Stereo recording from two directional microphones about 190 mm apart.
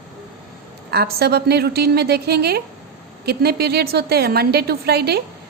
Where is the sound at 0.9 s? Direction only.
55° right (ahead or behind).